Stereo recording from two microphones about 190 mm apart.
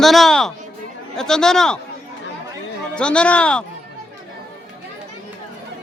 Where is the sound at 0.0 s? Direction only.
Centre (ahead or behind).